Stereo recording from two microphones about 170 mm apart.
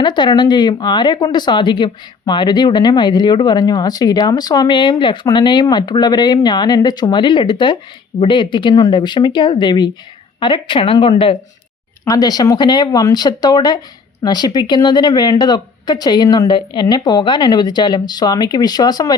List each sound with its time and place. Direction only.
0.0 s speech: 25° left (ahead or behind)